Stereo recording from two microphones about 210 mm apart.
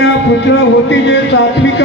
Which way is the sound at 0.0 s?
55° left (ahead or behind).